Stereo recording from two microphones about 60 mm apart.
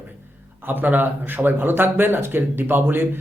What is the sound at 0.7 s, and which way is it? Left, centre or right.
Speech, right.